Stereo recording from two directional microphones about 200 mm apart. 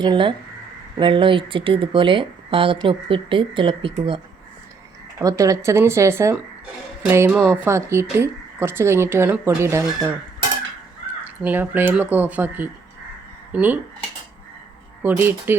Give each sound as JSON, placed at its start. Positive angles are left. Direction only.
{"t": 0.0, "sound": "speech", "side_deg": -25}
{"t": 5.2, "sound": "speech", "side_deg": -15}
{"t": 11.2, "sound": "speech", "side_deg": -10}
{"t": 15.0, "sound": "speech", "side_deg": -10}